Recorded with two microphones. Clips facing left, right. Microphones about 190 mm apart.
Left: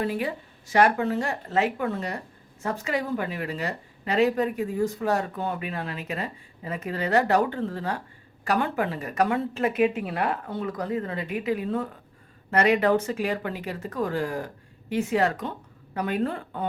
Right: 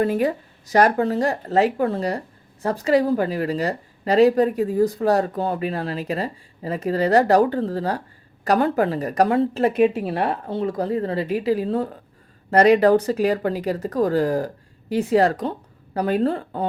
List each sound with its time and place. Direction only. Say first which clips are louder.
0.0 s speech: right 7 dB; 45° right (ahead or behind)